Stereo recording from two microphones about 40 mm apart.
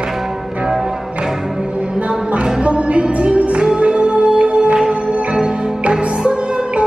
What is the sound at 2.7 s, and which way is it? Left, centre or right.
Music, right.